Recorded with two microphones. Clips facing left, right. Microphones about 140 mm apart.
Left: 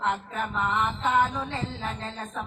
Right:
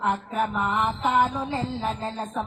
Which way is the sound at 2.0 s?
30° right (ahead or behind).